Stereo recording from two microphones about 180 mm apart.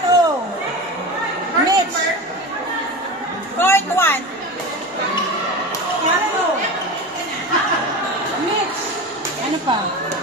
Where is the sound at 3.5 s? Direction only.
10° left (ahead or behind).